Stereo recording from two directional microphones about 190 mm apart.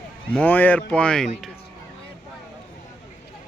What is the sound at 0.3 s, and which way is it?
Speech, 10° left (ahead or behind).